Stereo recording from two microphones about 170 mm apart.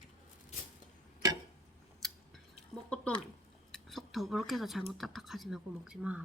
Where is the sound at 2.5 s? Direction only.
5° left (ahead or behind).